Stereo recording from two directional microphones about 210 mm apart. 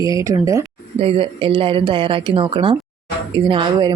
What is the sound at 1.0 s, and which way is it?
A woman's voice, 25° right (ahead or behind).